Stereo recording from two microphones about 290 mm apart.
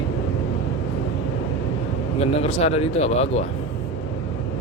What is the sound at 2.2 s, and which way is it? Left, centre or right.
Speech, centre.